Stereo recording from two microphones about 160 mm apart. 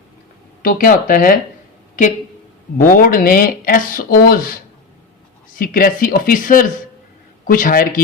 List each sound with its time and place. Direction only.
0.6 s speech: 60° left (ahead or behind)
2.7 s speech: 60° left (ahead or behind)
5.5 s speech: 60° left (ahead or behind)